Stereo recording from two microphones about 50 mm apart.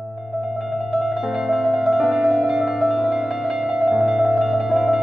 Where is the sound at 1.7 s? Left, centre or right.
Centre.